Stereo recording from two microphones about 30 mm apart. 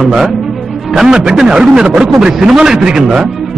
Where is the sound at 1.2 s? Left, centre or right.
Centre.